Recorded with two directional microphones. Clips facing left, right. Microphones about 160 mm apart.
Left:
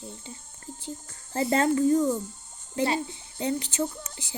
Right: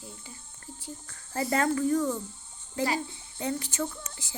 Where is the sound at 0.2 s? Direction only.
20° left (ahead or behind).